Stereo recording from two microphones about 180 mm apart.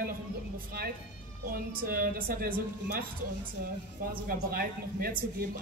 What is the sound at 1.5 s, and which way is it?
A woman's voice, 55° right (ahead or behind).